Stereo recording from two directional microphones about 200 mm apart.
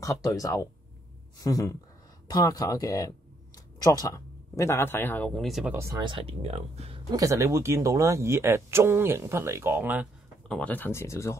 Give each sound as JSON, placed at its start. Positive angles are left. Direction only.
{"t": 0.0, "sound": "speech", "side_deg": 15}
{"t": 5.8, "sound": "speech", "side_deg": -20}
{"t": 7.1, "sound": "speech", "side_deg": -15}
{"t": 10.5, "sound": "speech", "side_deg": 5}